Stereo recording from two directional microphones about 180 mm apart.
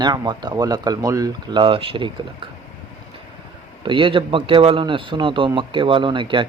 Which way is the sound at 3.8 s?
30° right (ahead or behind).